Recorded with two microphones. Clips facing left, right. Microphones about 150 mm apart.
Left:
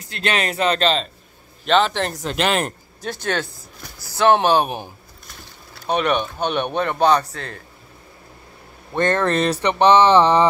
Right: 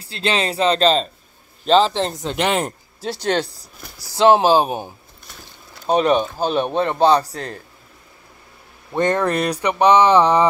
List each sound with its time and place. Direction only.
0.0 s a man's voice: 30° right (ahead or behind)
2.2 s speech: 15° right (ahead or behind)
3.0 s a man's voice: 30° right (ahead or behind)
5.9 s a man's voice: 30° right (ahead or behind)
8.9 s speech: 15° right (ahead or behind)